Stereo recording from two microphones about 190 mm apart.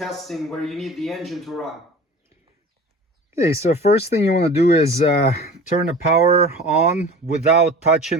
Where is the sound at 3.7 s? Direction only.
35° left (ahead or behind).